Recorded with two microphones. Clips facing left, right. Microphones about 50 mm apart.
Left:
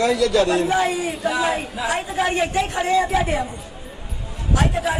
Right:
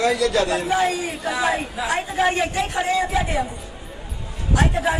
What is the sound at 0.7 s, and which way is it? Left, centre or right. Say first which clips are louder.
A woman's voice: left 1 dB; centre.